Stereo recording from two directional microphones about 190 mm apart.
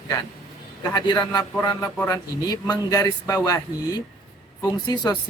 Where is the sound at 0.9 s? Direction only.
20° left (ahead or behind).